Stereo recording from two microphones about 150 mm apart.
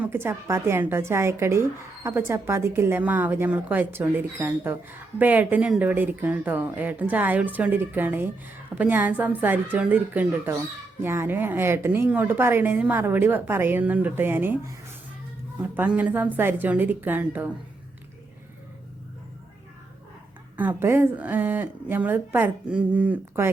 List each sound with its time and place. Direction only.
0.0 s a woman's voice: 15° right (ahead or behind)
20.6 s a woman's voice: 15° right (ahead or behind)